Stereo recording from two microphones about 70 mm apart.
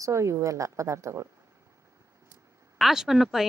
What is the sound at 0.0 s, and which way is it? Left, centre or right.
Speech, right.